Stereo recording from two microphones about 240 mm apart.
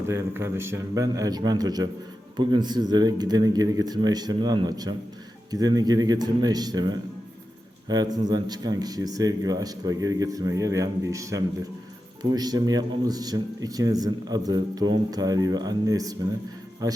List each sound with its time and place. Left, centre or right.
0.1 s speech: centre